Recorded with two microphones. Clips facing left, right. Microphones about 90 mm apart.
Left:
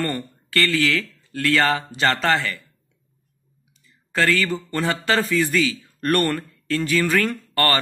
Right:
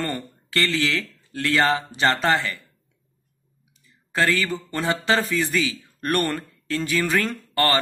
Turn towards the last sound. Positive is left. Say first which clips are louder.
# even
turn(degrees=-20)  # may be behind; listen again after turning